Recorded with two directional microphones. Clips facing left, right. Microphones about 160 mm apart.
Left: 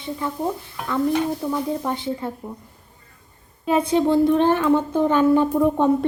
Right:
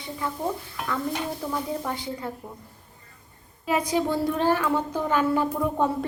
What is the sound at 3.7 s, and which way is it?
Speech, 30° left (ahead or behind).